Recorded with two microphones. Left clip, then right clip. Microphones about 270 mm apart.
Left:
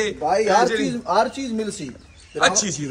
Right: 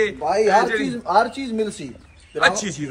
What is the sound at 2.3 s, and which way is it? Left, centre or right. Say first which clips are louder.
Speech: even; centre.